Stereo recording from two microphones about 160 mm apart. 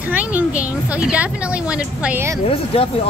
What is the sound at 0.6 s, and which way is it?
A woman's voice, 10° right (ahead or behind).